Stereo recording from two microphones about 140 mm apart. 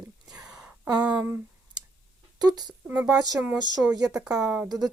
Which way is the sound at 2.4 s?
30° right (ahead or behind).